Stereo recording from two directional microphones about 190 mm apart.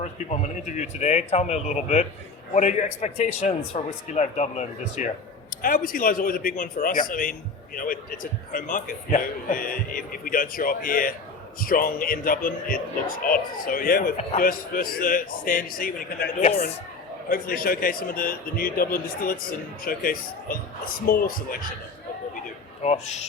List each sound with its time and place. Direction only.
0.0 s a man's voice: 40° left (ahead or behind)
5.6 s a man's voice: 50° left (ahead or behind)
22.8 s a man's voice: 35° left (ahead or behind)